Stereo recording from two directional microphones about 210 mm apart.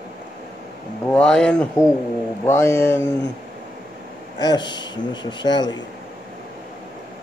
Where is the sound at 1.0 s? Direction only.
5° left (ahead or behind).